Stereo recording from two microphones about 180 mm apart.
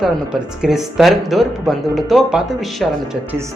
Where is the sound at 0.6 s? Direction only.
5° right (ahead or behind).